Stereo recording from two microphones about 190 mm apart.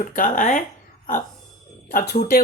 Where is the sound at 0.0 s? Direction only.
45° left (ahead or behind).